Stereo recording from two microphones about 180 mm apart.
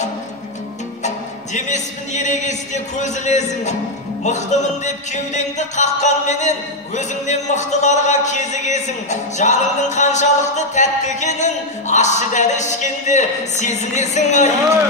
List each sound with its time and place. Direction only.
1.0 s speech: 40° left (ahead or behind)